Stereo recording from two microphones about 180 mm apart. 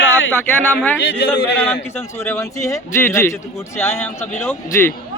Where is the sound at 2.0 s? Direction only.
15° left (ahead or behind).